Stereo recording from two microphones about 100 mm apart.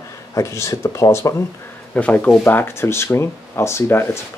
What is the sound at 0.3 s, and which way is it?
Speech, 30° left (ahead or behind).